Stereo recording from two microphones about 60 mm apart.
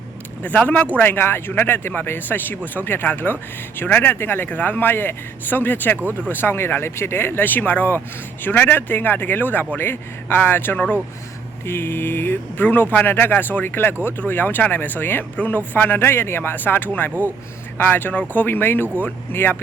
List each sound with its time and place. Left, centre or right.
0.4 s speech: left
4.1 s speech: left
4.4 s speech: left